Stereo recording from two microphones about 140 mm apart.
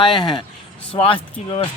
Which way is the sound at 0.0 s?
35° left (ahead or behind).